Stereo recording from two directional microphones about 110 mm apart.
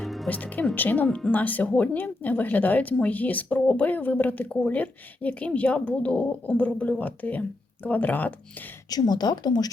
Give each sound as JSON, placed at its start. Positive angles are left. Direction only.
{"t": 0.0, "sound": "music", "side_deg": 0}
{"t": 0.3, "sound": "speech", "side_deg": 15}
{"t": 8.9, "sound": "speech", "side_deg": 40}